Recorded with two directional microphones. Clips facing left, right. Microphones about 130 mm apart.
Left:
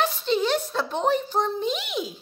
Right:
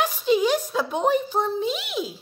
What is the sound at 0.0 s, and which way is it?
A child's voice, 10° right (ahead or behind).